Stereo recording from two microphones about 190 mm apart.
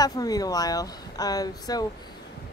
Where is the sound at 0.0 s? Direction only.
20° left (ahead or behind).